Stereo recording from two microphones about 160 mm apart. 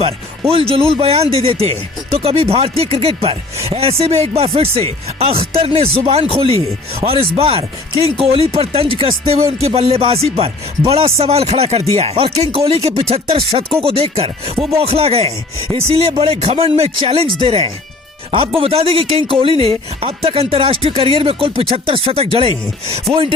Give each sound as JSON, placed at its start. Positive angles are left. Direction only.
{"t": 0.0, "sound": "speech", "side_deg": -35}